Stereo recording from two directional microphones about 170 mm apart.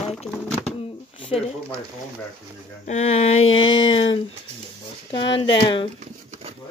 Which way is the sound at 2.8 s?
40° left (ahead or behind).